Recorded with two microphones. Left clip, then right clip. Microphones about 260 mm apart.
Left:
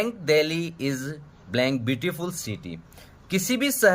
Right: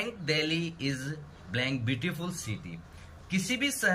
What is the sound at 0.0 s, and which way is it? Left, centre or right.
A woman's voice, centre.